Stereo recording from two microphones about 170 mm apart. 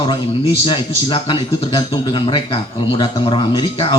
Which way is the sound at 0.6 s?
30° left (ahead or behind).